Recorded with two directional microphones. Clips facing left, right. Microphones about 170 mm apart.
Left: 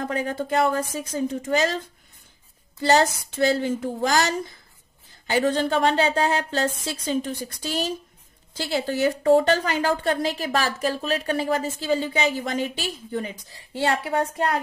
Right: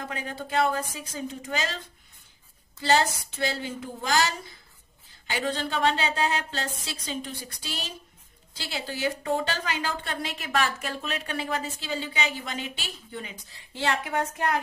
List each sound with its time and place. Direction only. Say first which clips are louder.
0.1 s a woman's voice: left 5 dB; 45° left (ahead or behind)
2.9 s a woman's voice: left 4 dB; 45° left (ahead or behind)